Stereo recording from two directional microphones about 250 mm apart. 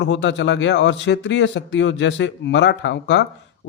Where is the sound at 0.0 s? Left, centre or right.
Left.